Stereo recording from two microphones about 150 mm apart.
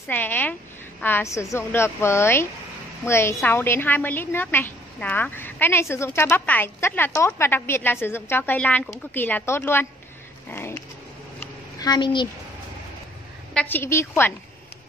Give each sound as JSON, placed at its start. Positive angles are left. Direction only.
{"t": 0.1, "sound": "a woman's voice", "side_deg": 10}
{"t": 10.5, "sound": "dog", "side_deg": 15}
{"t": 11.8, "sound": "a woman's voice", "side_deg": 30}
{"t": 13.5, "sound": "a woman's voice", "side_deg": 10}